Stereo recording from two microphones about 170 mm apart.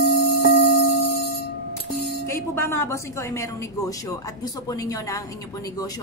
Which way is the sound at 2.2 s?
15° left (ahead or behind).